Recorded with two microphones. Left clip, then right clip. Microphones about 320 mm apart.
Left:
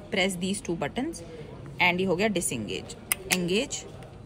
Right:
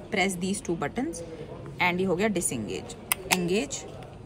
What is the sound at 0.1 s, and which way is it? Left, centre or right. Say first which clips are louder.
A woman's voice: even; centre.